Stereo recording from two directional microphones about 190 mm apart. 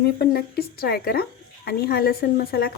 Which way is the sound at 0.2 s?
55° left (ahead or behind).